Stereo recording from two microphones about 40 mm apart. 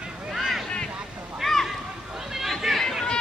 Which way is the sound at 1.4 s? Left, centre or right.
Centre.